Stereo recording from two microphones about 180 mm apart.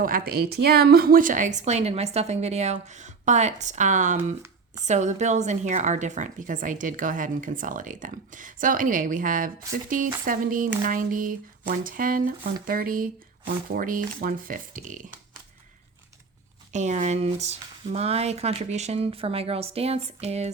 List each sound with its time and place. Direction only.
0.0 s a woman's voice: 55° right (ahead or behind)
16.7 s a woman's voice: 40° right (ahead or behind)